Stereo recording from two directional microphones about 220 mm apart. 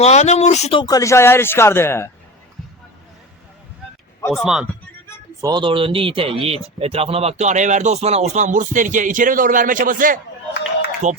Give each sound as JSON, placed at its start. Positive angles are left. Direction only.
{"t": 0.0, "sound": "speech", "side_deg": 30}
{"t": 4.3, "sound": "speech", "side_deg": 0}
{"t": 5.4, "sound": "speech", "side_deg": -20}